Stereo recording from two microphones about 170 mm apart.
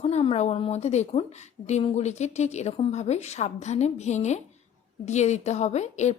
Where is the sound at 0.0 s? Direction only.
35° left (ahead or behind).